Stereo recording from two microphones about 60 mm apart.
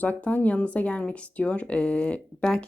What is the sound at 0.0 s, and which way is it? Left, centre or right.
Speech, left.